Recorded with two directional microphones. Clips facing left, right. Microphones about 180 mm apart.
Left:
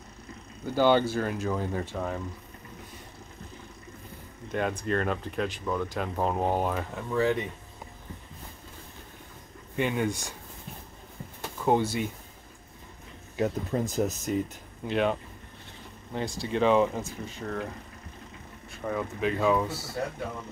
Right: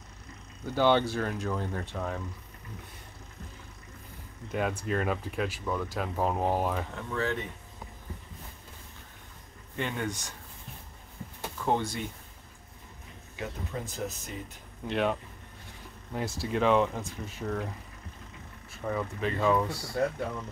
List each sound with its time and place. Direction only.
0.7 s speech: centre (ahead or behind)
4.5 s speech: 5° right (ahead or behind)
7.1 s speech: 15° left (ahead or behind)
9.8 s speech: 10° left (ahead or behind)
11.6 s speech: 10° left (ahead or behind)
13.4 s speech: 40° left (ahead or behind)
14.9 s speech: centre (ahead or behind)
18.7 s speech: centre (ahead or behind)